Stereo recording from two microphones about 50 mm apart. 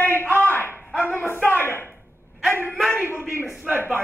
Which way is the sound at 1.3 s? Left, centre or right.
Left.